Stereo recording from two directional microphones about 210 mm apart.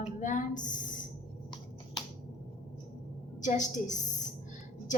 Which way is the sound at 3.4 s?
35° left (ahead or behind).